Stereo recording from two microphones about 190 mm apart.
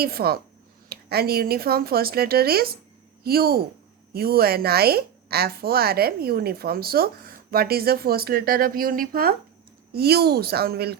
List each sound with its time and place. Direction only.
0.0 s a woman's voice: 55° right (ahead or behind)